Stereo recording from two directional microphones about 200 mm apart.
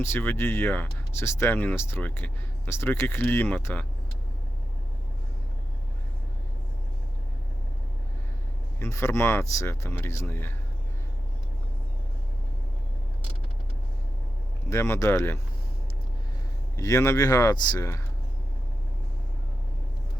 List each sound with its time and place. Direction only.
0.0 s speech: 10° left (ahead or behind)
8.8 s speech: 15° left (ahead or behind)
14.7 s speech: 15° left (ahead or behind)
16.7 s speech: 15° left (ahead or behind)